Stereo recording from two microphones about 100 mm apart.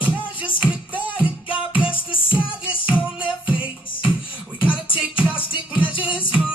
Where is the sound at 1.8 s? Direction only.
60° left (ahead or behind).